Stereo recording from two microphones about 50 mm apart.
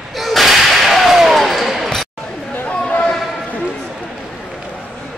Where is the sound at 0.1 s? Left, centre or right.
Centre.